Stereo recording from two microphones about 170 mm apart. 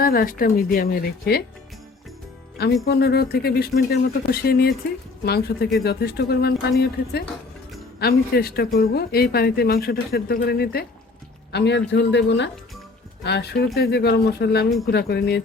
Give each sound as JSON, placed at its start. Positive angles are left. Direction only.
{"t": 0.0, "sound": "speech", "side_deg": 60}
{"t": 2.8, "sound": "speech", "side_deg": 70}
{"t": 11.5, "sound": "speech", "side_deg": 90}
{"t": 13.2, "sound": "speech", "side_deg": 80}